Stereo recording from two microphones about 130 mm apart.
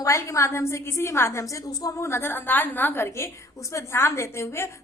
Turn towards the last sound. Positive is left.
turn(degrees=20)  # may be behind; listen again after turning